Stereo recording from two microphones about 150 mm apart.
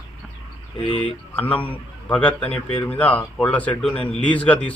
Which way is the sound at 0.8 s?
40° left (ahead or behind).